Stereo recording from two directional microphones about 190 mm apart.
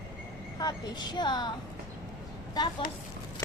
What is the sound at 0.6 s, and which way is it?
Speech, 20° left (ahead or behind).